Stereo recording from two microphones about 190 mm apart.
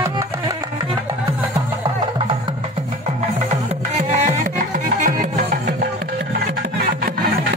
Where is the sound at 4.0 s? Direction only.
40° right (ahead or behind).